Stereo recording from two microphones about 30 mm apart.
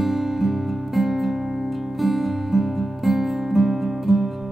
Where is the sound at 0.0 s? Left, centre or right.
Centre.